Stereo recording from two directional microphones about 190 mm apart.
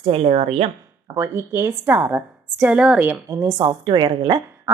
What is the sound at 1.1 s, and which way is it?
A woman's voice, 15° right (ahead or behind).